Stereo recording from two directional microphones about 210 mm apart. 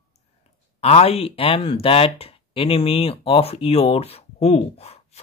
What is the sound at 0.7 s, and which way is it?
Speech, 30° left (ahead or behind).